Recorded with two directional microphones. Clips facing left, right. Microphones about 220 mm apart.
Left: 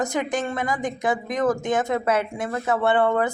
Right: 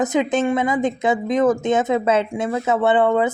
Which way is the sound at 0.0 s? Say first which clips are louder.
Right 6 dB; 20° right (ahead or behind).